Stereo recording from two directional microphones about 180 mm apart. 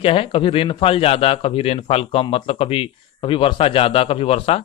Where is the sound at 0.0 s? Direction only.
30° left (ahead or behind).